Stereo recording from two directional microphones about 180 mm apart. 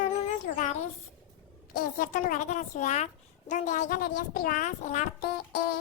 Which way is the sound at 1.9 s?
45° left (ahead or behind).